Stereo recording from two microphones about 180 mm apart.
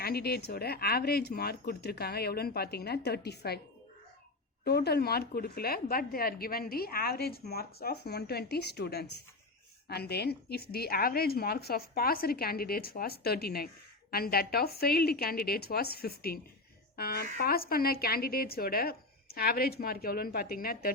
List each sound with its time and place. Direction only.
0.0 s speech: 60° left (ahead or behind)
4.6 s speech: 60° left (ahead or behind)